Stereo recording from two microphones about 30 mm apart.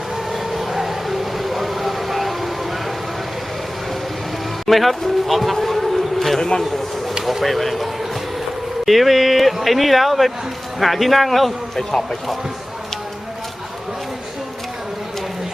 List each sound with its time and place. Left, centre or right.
0.5 s a sound: centre
4.6 s speech: centre
7.4 s speech: centre
8.9 s speech: centre